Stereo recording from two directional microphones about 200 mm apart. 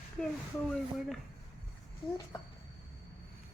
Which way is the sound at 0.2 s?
5° left (ahead or behind).